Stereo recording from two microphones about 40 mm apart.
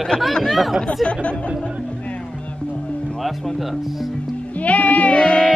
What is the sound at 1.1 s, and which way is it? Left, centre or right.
Music, left.